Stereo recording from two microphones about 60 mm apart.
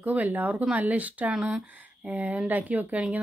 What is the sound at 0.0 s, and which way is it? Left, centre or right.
Speech, right.